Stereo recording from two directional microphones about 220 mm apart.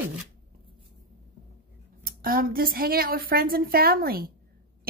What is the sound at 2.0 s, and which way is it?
A woman's voice, 40° right (ahead or behind).